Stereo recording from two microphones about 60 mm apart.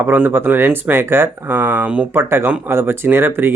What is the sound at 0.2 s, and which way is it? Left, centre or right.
Speech, right.